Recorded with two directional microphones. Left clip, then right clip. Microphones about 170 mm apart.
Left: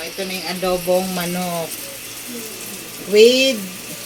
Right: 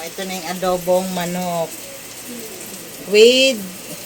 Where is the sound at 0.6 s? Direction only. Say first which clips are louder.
Right 1 dB; 15° right (ahead or behind).